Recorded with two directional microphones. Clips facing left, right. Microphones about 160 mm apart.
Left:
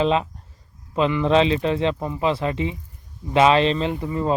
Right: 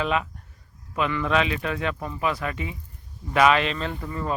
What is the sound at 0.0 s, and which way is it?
Speech, 30° left (ahead or behind).